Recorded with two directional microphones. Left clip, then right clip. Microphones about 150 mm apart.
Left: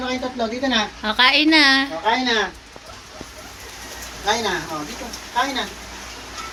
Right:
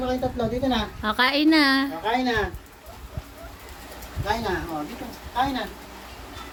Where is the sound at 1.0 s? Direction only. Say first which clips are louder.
Left 4 dB; 40° right (ahead or behind).